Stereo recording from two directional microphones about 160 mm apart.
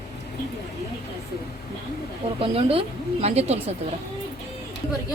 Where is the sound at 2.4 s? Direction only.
35° right (ahead or behind).